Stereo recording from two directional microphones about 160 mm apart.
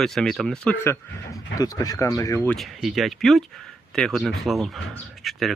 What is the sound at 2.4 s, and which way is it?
Speech, 5° left (ahead or behind).